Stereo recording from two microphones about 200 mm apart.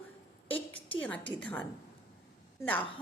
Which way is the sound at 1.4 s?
5° left (ahead or behind).